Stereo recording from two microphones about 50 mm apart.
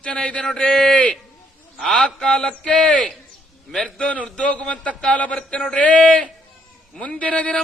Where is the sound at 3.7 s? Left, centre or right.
Centre.